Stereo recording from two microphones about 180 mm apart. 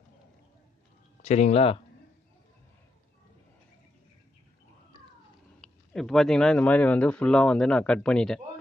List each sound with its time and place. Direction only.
1.2 s speech: 40° left (ahead or behind)
5.6 s speech: centre (ahead or behind)